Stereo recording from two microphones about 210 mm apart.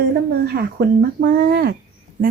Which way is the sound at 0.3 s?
50° right (ahead or behind).